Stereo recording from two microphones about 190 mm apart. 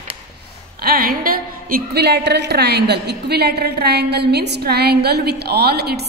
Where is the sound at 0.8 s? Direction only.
50° right (ahead or behind).